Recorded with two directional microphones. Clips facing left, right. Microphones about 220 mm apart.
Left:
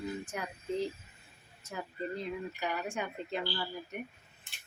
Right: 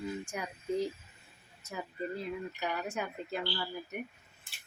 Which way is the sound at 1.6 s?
5° right (ahead or behind).